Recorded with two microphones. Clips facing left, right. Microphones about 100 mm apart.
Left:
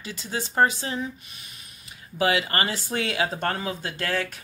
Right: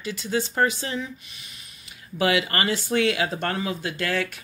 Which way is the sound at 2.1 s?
30° left (ahead or behind).